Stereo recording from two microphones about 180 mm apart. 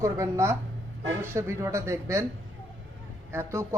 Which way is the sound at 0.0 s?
15° right (ahead or behind).